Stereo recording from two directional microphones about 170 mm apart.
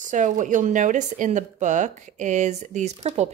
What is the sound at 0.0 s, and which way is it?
Speech, 50° right (ahead or behind).